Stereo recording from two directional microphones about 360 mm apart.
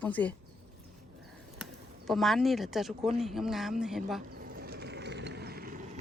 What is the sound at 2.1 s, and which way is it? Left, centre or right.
Speech, centre.